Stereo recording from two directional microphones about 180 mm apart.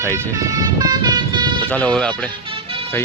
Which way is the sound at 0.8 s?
25° right (ahead or behind).